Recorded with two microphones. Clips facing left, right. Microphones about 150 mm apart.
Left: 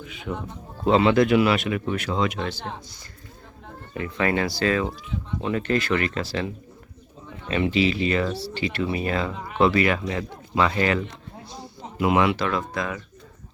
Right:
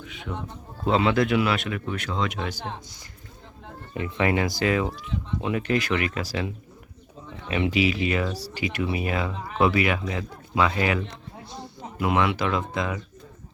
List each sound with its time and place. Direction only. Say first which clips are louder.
0.0 s speech: left 3 dB; centre (ahead or behind)
3.9 s speech: even; 20° right (ahead or behind)
7.4 s speech: left 2 dB; 10° right (ahead or behind)
11.8 s speech: left 3 dB; 5° left (ahead or behind)
12.4 s speech: even; 20° right (ahead or behind)